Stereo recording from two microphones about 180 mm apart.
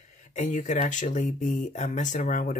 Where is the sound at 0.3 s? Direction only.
40° left (ahead or behind).